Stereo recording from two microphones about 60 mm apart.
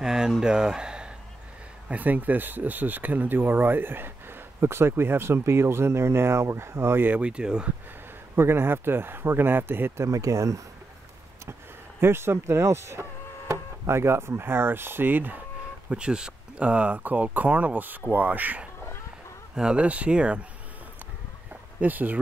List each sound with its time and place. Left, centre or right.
0.0 s speech: centre
1.9 s speech: right
7.1 s speech: centre
8.4 s speech: right
10.0 s speech: right
12.0 s speech: right
15.9 s speech: centre
19.5 s speech: centre
21.7 s speech: right